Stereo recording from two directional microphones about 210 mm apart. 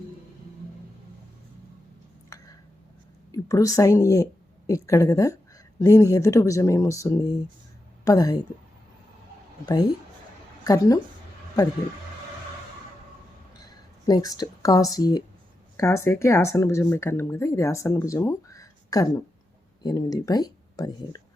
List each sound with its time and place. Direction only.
3.3 s a woman's voice: 15° left (ahead or behind)
10.6 s a woman's voice: 15° left (ahead or behind)
13.6 s speech: 15° left (ahead or behind)